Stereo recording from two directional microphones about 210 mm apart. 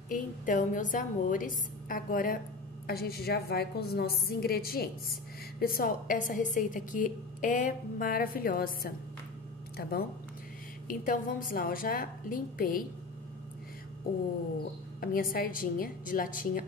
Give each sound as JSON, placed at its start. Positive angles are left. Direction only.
{"t": 0.1, "sound": "a woman's voice", "side_deg": 40}
{"t": 15.0, "sound": "a woman's voice", "side_deg": 45}